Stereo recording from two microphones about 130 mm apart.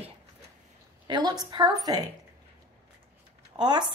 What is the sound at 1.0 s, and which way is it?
Speech, 35° right (ahead or behind).